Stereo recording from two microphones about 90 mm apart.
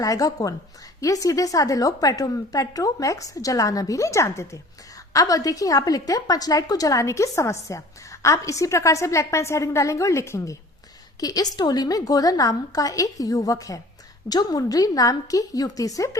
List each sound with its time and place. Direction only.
0.0 s a woman's voice: 40° left (ahead or behind)